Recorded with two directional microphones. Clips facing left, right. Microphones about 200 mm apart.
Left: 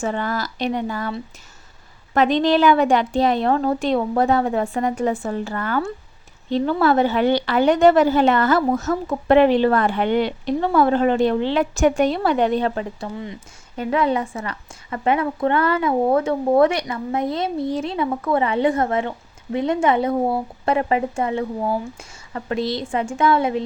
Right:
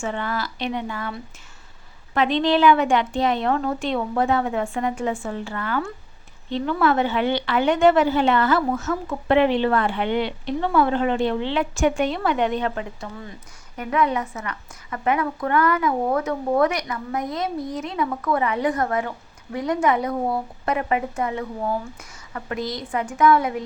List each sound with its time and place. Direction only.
0.0 s a woman's voice: 40° left (ahead or behind)
2.1 s a woman's voice: 40° left (ahead or behind); by 23.6 s 25° left (ahead or behind)